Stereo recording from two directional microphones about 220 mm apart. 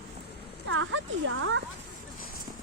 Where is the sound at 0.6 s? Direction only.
65° right (ahead or behind).